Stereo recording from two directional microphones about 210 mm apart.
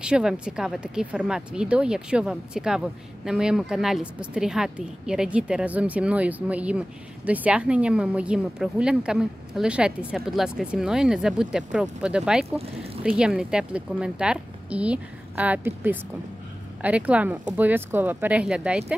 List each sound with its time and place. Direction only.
0.0 s speech: 5° right (ahead or behind)